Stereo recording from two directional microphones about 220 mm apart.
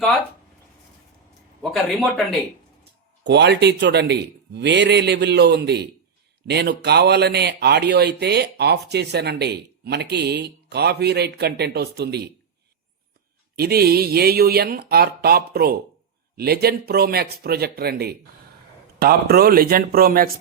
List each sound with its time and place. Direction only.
1.7 s a man's voice: centre (ahead or behind)
3.2 s speech: 50° right (ahead or behind)
13.6 s speech: 45° right (ahead or behind)